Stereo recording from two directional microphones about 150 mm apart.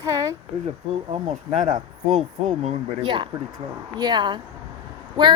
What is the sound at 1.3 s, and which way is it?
Speech, 55° right (ahead or behind).